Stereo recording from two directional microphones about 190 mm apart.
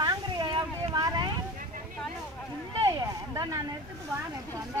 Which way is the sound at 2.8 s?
15° right (ahead or behind).